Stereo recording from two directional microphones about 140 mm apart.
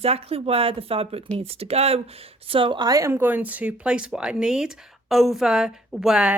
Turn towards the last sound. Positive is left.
turn(degrees=-5)  # may be behind; listen again after turning